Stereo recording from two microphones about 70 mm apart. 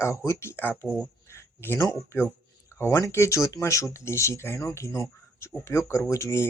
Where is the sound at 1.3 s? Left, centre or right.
Left.